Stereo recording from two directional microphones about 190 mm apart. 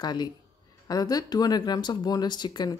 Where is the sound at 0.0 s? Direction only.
20° left (ahead or behind).